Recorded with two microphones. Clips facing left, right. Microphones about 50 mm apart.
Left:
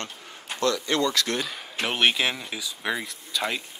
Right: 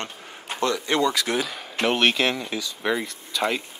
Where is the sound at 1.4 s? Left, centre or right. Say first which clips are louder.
Right 5 dB; centre.